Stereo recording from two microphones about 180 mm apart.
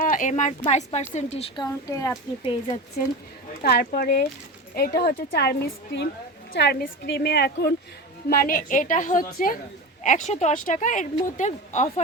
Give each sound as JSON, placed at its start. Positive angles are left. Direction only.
{"t": 0.0, "sound": "a woman's voice", "side_deg": 45}
{"t": 1.6, "sound": "a child's voice", "side_deg": 20}
{"t": 2.4, "sound": "a woman's voice", "side_deg": 30}
{"t": 3.0, "sound": "a woman's voice", "side_deg": 55}
{"t": 8.3, "sound": "a woman's voice", "side_deg": 55}